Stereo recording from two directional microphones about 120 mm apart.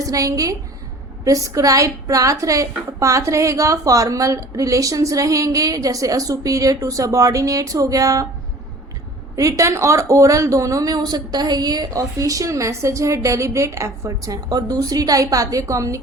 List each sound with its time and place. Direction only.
0.0 s a woman's voice: 30° right (ahead or behind)
9.3 s a woman's voice: 25° right (ahead or behind)